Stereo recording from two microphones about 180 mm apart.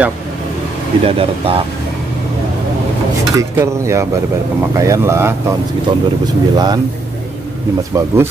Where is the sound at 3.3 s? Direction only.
15° right (ahead or behind).